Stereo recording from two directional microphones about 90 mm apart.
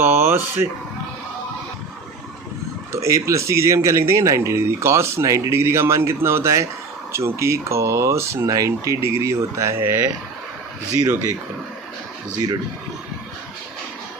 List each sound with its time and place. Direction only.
0.0 s speech: 25° right (ahead or behind)
2.9 s speech: 35° right (ahead or behind)